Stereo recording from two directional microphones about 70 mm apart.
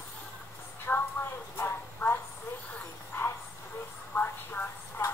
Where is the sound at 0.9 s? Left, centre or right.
Left.